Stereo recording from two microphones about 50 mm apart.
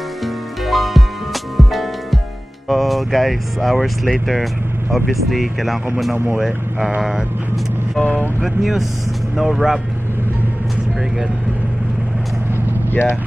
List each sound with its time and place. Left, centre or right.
0.2 s music: centre
2.7 s speech: centre
8.0 s speech: left
8.4 s speech: centre
13.0 s speech: left